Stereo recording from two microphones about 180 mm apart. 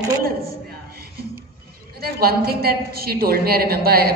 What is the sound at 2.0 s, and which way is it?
A woman's voice, 60° right (ahead or behind).